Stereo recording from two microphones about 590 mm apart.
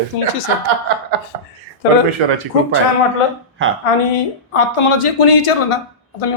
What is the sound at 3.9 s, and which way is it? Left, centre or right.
A woman's voice, left.